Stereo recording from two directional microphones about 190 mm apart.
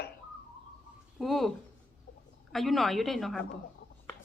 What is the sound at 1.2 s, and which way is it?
Speech, centre (ahead or behind).